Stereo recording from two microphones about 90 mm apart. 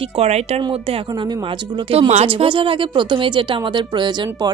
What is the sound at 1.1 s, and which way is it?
Speech, 55° right (ahead or behind).